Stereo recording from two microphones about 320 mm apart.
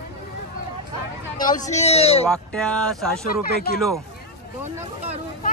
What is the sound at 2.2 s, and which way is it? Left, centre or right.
Speech, centre.